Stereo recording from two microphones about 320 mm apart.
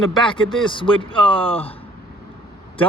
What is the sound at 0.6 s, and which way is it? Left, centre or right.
A man's voice, centre.